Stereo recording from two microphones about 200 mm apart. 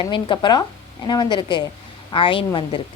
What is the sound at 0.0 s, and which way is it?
Speech, 25° left (ahead or behind).